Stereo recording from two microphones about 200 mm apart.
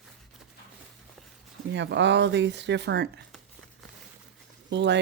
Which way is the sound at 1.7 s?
60° right (ahead or behind).